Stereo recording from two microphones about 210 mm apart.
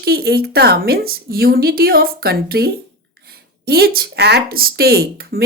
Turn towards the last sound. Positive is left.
turn(degrees=-45)  # may be behind; listen again after turning